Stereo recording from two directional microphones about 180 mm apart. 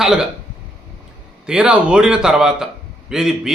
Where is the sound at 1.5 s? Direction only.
5° right (ahead or behind).